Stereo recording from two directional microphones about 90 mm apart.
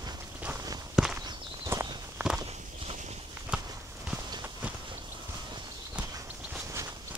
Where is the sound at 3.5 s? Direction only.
10° right (ahead or behind).